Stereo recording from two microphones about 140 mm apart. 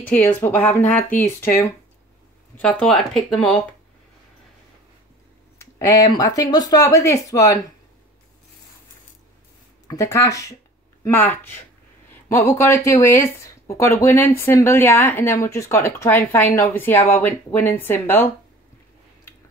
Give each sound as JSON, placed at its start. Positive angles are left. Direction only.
{"t": 0.1, "sound": "speech", "side_deg": 15}
{"t": 2.6, "sound": "speech", "side_deg": 5}
{"t": 5.6, "sound": "speech", "side_deg": 20}
{"t": 9.8, "sound": "speech", "side_deg": 25}